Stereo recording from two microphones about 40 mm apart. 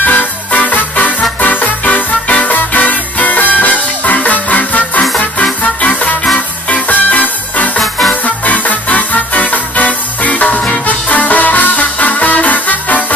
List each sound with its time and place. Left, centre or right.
0.0 s music: left